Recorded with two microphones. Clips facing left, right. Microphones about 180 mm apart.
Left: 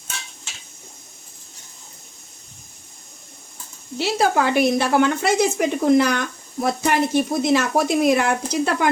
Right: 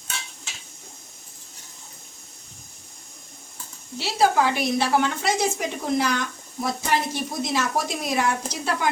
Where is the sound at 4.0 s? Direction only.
60° left (ahead or behind).